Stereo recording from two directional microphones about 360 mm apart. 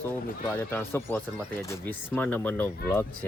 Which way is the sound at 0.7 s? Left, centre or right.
Centre.